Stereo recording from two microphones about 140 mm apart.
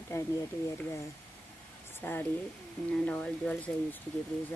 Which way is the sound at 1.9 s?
15° left (ahead or behind).